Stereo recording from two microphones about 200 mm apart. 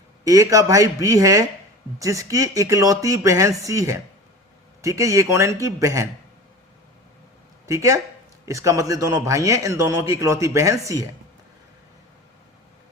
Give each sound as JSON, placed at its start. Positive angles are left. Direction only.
{"t": 0.3, "sound": "a man's voice", "side_deg": -15}
{"t": 7.7, "sound": "a man's voice", "side_deg": -15}